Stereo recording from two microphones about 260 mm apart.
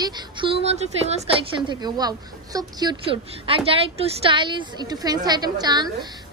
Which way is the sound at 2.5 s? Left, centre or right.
Centre.